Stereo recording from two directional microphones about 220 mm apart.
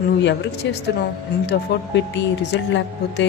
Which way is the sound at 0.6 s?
55° left (ahead or behind).